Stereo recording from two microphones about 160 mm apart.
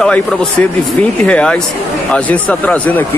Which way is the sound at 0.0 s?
5° left (ahead or behind).